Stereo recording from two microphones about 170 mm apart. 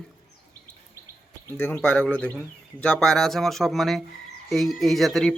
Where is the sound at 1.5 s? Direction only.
10° left (ahead or behind).